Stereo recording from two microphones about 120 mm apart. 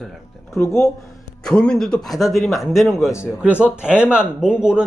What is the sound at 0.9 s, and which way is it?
A man's voice, 5° left (ahead or behind).